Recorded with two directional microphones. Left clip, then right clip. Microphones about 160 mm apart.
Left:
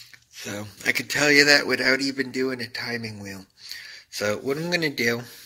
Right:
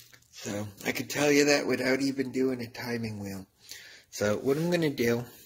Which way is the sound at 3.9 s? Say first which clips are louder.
Left 3 dB; 25° right (ahead or behind).